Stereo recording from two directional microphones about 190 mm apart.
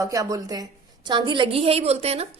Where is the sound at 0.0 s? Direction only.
15° right (ahead or behind).